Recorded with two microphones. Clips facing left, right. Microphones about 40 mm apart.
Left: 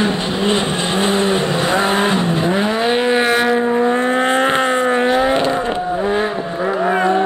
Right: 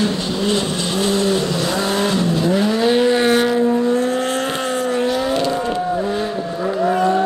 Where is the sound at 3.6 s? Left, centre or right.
Left.